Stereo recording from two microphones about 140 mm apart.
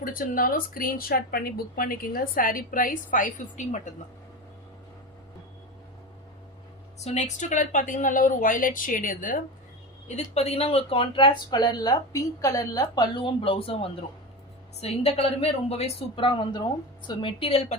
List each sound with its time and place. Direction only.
0.0 s speech: 85° left; by 3.9 s 60° left (ahead or behind)
7.0 s speech: 55° left (ahead or behind); by 9.4 s 75° left (ahead or behind)
10.1 s a woman's voice: 50° left (ahead or behind)